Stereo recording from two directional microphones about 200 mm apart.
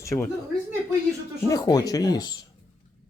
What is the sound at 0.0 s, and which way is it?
Speech, 15° left (ahead or behind).